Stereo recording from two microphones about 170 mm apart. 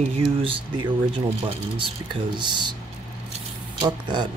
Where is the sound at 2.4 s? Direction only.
25° right (ahead or behind).